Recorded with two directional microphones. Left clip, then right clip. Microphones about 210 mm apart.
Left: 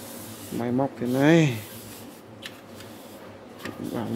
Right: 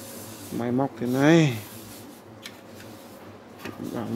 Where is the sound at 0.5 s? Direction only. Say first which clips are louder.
Even; centre (ahead or behind).